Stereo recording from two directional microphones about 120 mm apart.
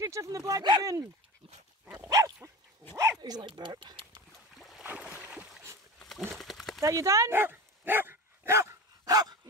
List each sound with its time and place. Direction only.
0.0 s speech: 25° right (ahead or behind)
1.9 s dog: 30° right (ahead or behind)
3.2 s speech: 35° right (ahead or behind)
4.6 s boat: centre (ahead or behind)
4.8 s boat: 15° right (ahead or behind)
5.9 s a sound: centre (ahead or behind)
6.8 s dog: 25° right (ahead or behind)